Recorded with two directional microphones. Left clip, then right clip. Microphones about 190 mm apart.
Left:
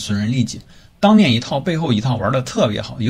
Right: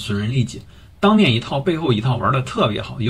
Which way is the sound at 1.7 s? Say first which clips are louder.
Right 1 dB; 35° left (ahead or behind).